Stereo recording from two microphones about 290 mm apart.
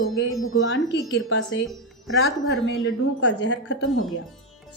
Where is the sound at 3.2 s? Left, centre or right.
Left.